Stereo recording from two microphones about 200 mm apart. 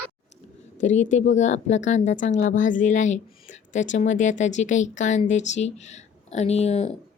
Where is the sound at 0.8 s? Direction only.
40° left (ahead or behind).